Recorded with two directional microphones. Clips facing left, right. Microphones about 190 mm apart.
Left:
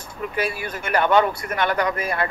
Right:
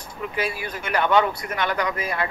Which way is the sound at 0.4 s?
50° left (ahead or behind).